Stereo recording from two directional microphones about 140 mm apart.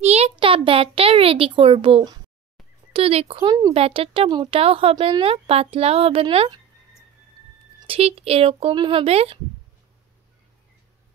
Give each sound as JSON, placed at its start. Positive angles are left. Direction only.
{"t": 0.0, "sound": "a sound", "side_deg": -50}
{"t": 2.9, "sound": "speech", "side_deg": -45}
{"t": 3.7, "sound": "speech", "side_deg": -45}
{"t": 4.3, "sound": "speech", "side_deg": -30}
{"t": 4.6, "sound": "speech", "side_deg": -45}
{"t": 7.8, "sound": "speech", "side_deg": -45}